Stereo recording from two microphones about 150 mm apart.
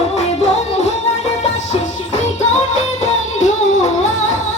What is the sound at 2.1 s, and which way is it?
Music, 50° left (ahead or behind).